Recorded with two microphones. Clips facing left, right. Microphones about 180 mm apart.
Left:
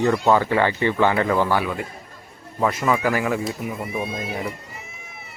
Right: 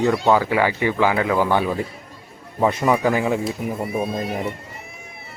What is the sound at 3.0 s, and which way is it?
Speech, 20° right (ahead or behind).